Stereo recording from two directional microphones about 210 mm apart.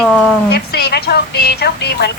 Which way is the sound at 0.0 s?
Centre (ahead or behind).